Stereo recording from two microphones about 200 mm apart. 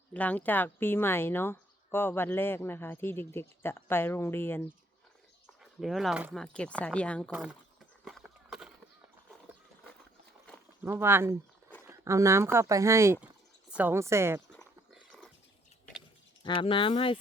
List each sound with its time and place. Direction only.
0.1 s speech: 5° left (ahead or behind)
5.8 s speech: centre (ahead or behind)
8.0 s horse: centre (ahead or behind)
10.8 s speech: 10° right (ahead or behind)
14.9 s a sound: 5° left (ahead or behind)
16.4 s speech: 25° left (ahead or behind)